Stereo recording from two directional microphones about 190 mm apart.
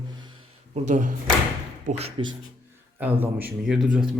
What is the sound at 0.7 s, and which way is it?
Speech, 40° right (ahead or behind).